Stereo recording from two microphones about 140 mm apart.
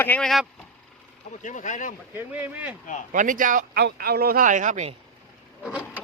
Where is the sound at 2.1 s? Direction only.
10° right (ahead or behind).